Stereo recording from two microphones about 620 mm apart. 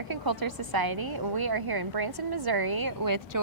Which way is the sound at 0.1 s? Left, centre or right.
Right.